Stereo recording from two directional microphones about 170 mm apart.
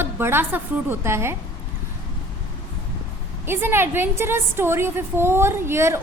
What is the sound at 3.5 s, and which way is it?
A woman's voice, 15° right (ahead or behind).